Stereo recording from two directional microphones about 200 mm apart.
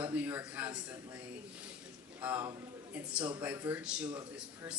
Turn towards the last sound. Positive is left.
turn(degrees=-10)  # may be behind; listen again after turning